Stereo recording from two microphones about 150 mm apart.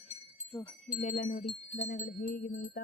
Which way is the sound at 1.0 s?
55° left (ahead or behind).